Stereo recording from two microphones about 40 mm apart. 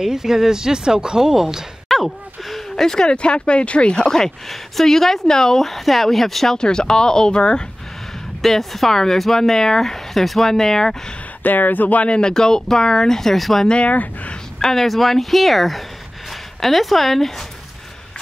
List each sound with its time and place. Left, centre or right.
0.0 s speech: centre
1.9 s a sound: centre
2.7 s speech: centre
3.2 s speech: left; by 6.6 s centre
6.6 s speech: centre
8.4 s speech: centre
11.4 s speech: left
12.1 s speech: centre
13.7 s speech: left
14.6 s speech: centre